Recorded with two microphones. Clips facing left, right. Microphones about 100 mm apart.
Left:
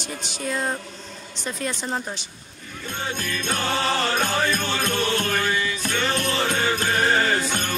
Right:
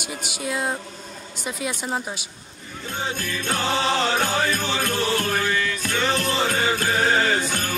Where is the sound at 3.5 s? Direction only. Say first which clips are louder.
Right 2 dB; 15° right (ahead or behind).